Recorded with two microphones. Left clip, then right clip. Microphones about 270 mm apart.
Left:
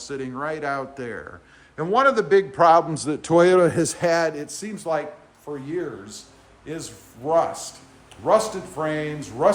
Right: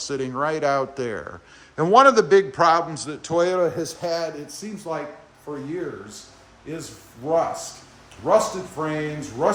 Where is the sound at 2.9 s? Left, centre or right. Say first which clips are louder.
Left 5 dB; centre; by 4.2 s left.